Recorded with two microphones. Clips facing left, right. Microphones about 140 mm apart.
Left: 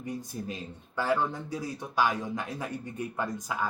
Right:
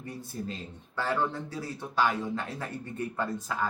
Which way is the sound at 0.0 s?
15° left (ahead or behind).